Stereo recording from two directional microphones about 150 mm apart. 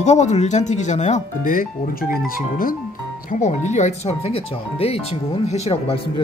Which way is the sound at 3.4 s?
50° left (ahead or behind).